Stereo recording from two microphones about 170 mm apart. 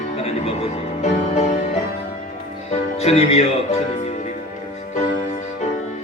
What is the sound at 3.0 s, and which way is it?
Speech, 35° left (ahead or behind).